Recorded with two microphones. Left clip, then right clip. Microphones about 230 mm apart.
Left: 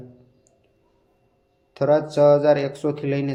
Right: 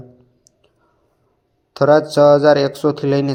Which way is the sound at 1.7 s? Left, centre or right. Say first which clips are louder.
Right 7 dB; right.